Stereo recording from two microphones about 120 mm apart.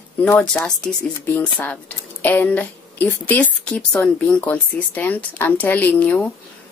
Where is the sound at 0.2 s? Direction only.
10° left (ahead or behind).